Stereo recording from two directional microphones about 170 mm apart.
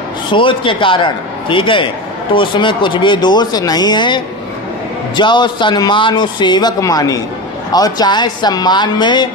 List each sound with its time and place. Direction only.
0.3 s a man's voice: 30° left (ahead or behind)